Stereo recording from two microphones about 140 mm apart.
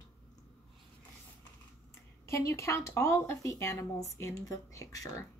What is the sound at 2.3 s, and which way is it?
Speech, 20° left (ahead or behind).